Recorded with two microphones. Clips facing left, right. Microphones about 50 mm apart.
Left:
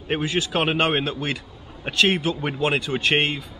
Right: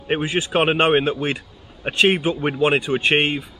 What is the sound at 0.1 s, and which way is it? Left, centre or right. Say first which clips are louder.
Speech: right 3 dB; right.